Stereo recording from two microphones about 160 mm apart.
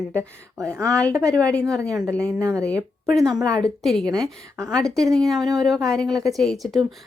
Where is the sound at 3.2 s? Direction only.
Centre (ahead or behind).